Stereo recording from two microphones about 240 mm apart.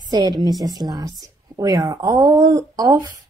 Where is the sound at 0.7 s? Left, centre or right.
Centre.